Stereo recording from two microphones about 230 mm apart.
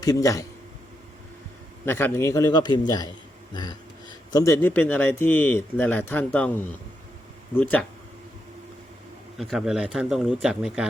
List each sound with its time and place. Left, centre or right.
0.0 s speech: centre
1.8 s speech: centre
9.4 s speech: centre